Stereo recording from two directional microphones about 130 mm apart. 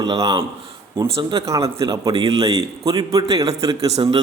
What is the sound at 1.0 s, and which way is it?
Speech, 45° right (ahead or behind).